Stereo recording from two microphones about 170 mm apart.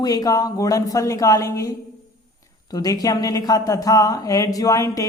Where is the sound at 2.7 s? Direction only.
20° left (ahead or behind).